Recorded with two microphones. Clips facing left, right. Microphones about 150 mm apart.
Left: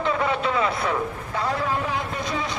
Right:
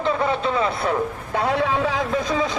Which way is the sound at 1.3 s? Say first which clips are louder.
Right 5 dB; 70° right (ahead or behind).